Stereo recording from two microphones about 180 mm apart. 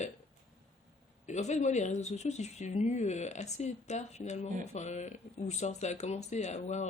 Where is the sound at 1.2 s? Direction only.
40° left (ahead or behind).